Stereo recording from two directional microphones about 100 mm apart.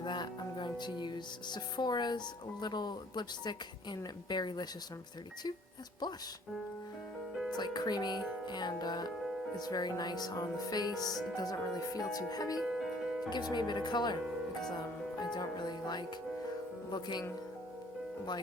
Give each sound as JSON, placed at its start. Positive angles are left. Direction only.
{"t": 0.0, "sound": "speech", "side_deg": 50}
{"t": 7.5, "sound": "speech", "side_deg": 45}
{"t": 9.1, "sound": "music", "side_deg": -5}
{"t": 9.6, "sound": "speech", "side_deg": 40}
{"t": 12.5, "sound": "music", "side_deg": -5}
{"t": 13.3, "sound": "speech", "side_deg": 45}
{"t": 15.2, "sound": "music", "side_deg": 45}
{"t": 16.9, "sound": "speech", "side_deg": 45}